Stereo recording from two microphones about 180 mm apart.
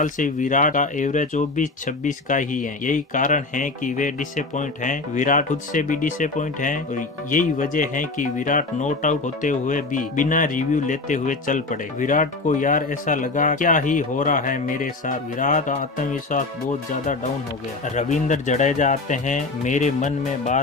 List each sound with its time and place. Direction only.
0.0 s speech: 45° left (ahead or behind)
17.9 s speech: 45° left (ahead or behind)